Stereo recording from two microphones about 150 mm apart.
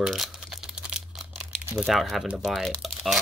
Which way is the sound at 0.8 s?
5° right (ahead or behind).